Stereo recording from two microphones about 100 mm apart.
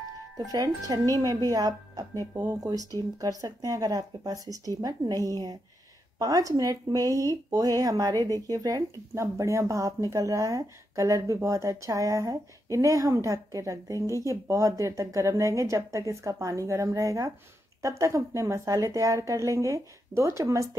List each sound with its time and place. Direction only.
0.5 s speech: 35° right (ahead or behind)